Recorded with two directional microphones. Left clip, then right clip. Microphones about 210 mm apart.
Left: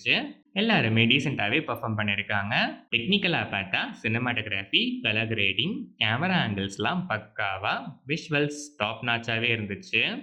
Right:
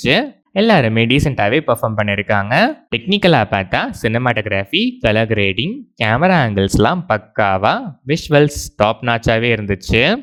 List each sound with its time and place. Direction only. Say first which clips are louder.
0.0 s speech: right 10 dB; 50° right (ahead or behind)